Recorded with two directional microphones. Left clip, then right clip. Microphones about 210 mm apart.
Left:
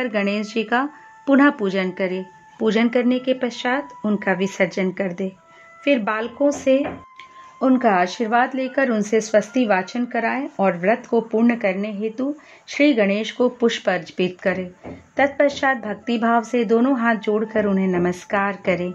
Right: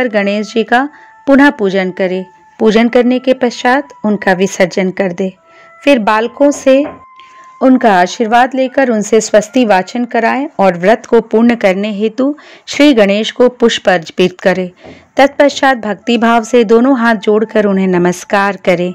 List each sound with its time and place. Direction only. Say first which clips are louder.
0.0 s speech: right 10 dB; 30° right (ahead or behind)